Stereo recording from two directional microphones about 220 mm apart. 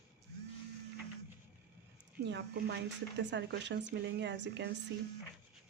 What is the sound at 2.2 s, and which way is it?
Speech, 50° right (ahead or behind).